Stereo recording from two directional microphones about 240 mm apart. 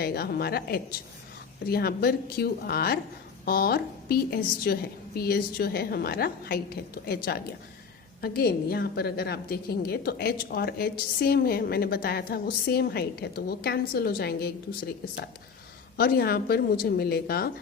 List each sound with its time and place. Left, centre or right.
0.0 s a woman's voice: left